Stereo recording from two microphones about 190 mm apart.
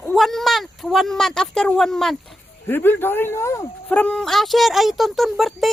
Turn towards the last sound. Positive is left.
turn(degrees=0)  # may be behind; listen again after turning